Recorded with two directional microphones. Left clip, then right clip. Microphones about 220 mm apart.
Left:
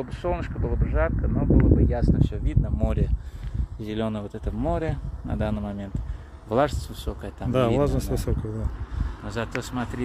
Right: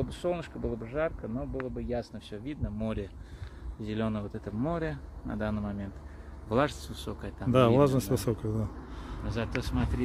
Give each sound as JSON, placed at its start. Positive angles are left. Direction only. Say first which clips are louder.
{"t": 0.0, "sound": "speech", "louder": "left 4 dB", "side_deg": 10}
{"t": 7.5, "sound": "speech", "louder": "left 1 dB", "side_deg": 0}
{"t": 9.3, "sound": "speech", "louder": "left 4 dB", "side_deg": 20}